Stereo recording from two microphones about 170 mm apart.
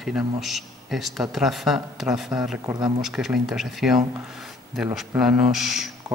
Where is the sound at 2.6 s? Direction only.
25° right (ahead or behind).